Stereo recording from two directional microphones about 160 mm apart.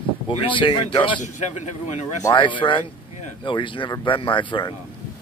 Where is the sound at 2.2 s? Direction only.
30° left (ahead or behind).